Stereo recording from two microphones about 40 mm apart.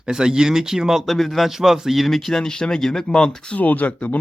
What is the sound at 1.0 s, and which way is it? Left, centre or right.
Speech, centre.